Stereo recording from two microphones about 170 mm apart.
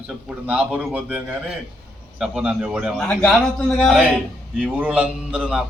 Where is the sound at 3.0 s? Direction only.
10° left (ahead or behind).